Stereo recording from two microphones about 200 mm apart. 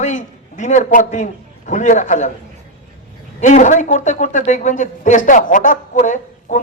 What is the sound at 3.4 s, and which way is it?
Speech, 40° left (ahead or behind).